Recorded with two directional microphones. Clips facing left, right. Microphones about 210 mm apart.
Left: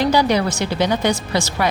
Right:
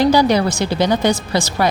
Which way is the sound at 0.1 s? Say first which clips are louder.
Right 3 dB; 40° right (ahead or behind).